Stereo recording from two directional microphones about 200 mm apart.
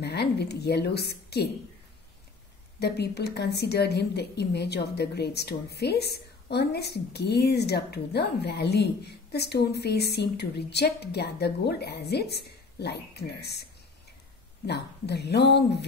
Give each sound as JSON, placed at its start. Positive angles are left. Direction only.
{"t": 0.0, "sound": "a woman's voice", "side_deg": 55}
{"t": 2.8, "sound": "a woman's voice", "side_deg": 55}
{"t": 14.7, "sound": "a woman's voice", "side_deg": 55}